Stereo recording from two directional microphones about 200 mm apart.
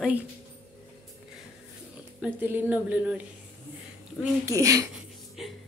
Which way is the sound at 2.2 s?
10° right (ahead or behind).